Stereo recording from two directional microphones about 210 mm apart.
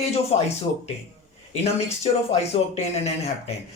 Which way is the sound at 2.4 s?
30° left (ahead or behind).